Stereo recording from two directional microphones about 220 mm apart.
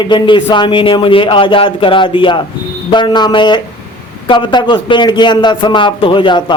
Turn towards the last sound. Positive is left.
turn(degrees=20)  # may be behind; listen again after turning